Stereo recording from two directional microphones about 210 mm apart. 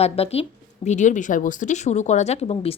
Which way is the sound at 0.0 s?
30° left (ahead or behind).